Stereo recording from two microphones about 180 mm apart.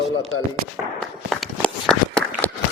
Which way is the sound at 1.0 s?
Centre (ahead or behind).